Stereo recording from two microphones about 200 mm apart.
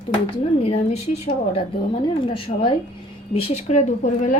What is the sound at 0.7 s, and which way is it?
A woman's voice, 30° left (ahead or behind).